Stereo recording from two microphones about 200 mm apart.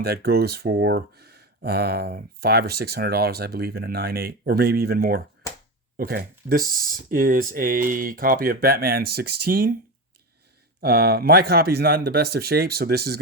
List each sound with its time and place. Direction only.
0.0 s speech: 50° right (ahead or behind)
10.8 s speech: 50° right (ahead or behind)